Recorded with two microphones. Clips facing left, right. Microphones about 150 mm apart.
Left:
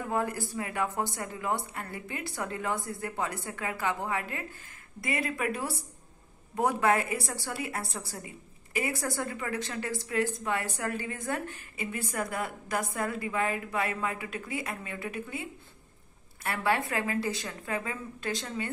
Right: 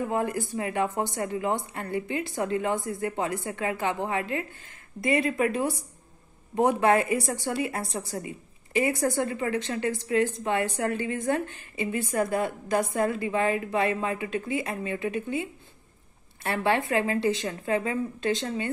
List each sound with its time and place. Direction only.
0.1 s a woman's voice: 20° right (ahead or behind)
16.4 s a woman's voice: 25° right (ahead or behind)